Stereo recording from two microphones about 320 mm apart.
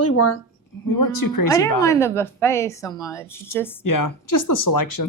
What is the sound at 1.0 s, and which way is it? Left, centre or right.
Speech, left.